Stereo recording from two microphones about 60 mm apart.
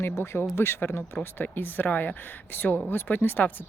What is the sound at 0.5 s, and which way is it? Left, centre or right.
Speech, left.